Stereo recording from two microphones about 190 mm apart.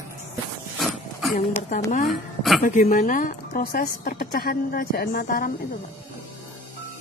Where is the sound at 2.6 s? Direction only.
45° left (ahead or behind).